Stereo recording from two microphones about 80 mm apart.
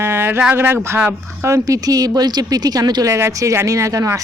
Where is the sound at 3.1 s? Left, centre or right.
Right.